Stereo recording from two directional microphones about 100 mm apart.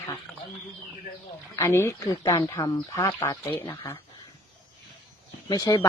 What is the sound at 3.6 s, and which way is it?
Speech, 20° left (ahead or behind).